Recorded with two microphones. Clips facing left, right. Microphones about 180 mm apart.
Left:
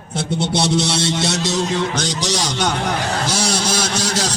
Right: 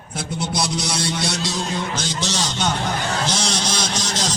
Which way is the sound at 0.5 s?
25° left (ahead or behind).